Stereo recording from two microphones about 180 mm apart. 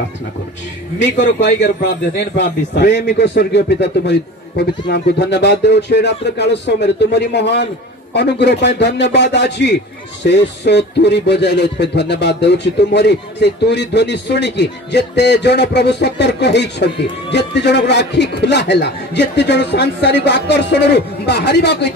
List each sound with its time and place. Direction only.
1.2 s speech: 70° left (ahead or behind)